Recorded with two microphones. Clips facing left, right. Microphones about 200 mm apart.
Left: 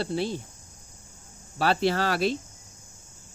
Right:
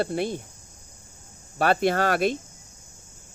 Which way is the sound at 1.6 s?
50° right (ahead or behind).